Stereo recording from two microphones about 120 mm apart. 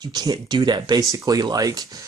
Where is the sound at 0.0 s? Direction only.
35° right (ahead or behind).